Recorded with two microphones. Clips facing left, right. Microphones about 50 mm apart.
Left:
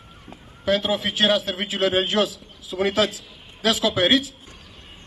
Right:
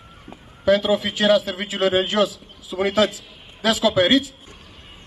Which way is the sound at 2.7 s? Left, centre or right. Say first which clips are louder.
Right 1 dB; right.